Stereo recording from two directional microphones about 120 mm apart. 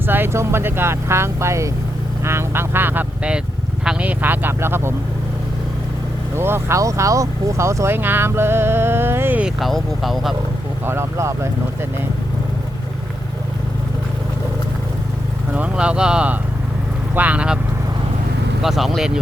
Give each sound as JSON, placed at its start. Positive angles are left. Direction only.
{"t": 0.1, "sound": "speech", "side_deg": -20}
{"t": 6.3, "sound": "speech", "side_deg": -20}
{"t": 9.6, "sound": "speech", "side_deg": 0}
{"t": 10.8, "sound": "speech", "side_deg": -20}
{"t": 15.5, "sound": "speech", "side_deg": -10}
{"t": 18.6, "sound": "speech", "side_deg": -5}